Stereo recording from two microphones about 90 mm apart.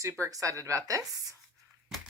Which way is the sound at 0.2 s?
40° right (ahead or behind).